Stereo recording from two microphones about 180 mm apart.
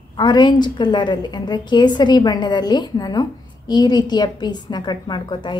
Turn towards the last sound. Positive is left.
turn(degrees=25)  # may be behind; listen again after turning